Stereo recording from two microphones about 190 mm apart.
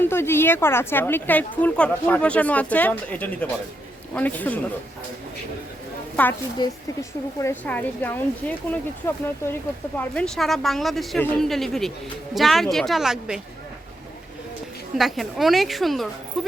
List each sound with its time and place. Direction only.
0.0 s speech: 10° left (ahead or behind)
6.2 s speech: 5° left (ahead or behind)
6.6 s a woman's voice: 20° left (ahead or behind); by 13.4 s 5° right (ahead or behind)
14.9 s a woman's voice: centre (ahead or behind)